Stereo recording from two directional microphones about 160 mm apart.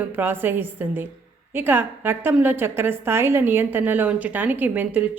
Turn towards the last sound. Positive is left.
turn(degrees=-10)  # may be behind; listen again after turning